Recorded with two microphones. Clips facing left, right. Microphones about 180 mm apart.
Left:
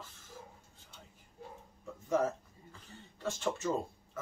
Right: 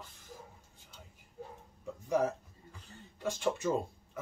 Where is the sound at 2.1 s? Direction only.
15° right (ahead or behind).